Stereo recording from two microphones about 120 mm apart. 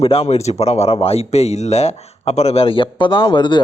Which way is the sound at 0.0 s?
55° left (ahead or behind).